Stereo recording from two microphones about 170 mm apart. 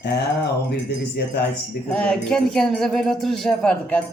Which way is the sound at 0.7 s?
70° left (ahead or behind).